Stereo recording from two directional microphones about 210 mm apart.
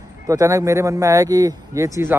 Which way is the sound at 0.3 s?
15° right (ahead or behind).